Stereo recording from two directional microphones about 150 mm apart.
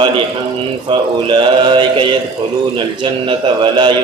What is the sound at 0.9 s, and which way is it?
A man's voice, 35° right (ahead or behind).